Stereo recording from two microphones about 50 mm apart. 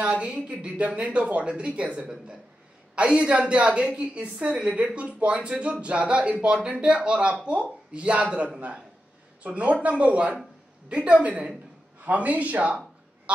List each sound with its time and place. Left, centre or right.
0.0 s a woman's voice: right